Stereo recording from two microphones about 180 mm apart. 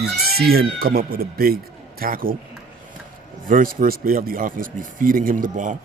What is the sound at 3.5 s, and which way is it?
Speech, 50° right (ahead or behind).